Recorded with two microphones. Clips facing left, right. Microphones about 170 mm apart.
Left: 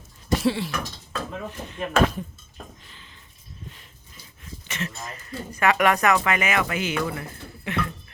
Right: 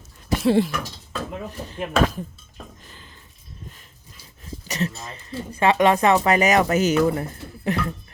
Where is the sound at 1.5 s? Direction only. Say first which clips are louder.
Right 1 dB; 35° right (ahead or behind).